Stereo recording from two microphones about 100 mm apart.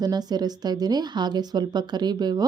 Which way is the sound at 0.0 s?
40° right (ahead or behind).